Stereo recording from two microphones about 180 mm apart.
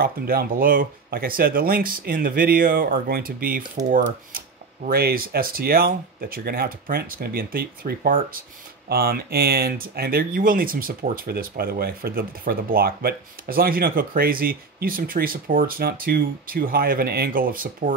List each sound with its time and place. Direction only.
0.0 s speech: 55° right (ahead or behind)
4.8 s speech: 55° right (ahead or behind)